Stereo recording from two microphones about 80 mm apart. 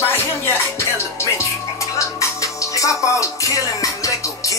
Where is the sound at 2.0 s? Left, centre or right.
Left.